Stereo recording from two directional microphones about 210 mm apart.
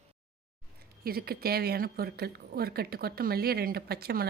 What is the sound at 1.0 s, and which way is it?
Speech, 45° right (ahead or behind).